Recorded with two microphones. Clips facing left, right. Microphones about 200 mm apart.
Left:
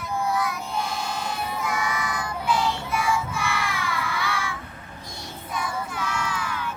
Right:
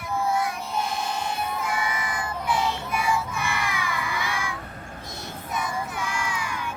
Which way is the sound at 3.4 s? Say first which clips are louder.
Left 1 dB; 15° right (ahead or behind).